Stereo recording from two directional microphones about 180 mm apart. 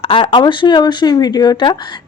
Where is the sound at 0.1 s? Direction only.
30° left (ahead or behind).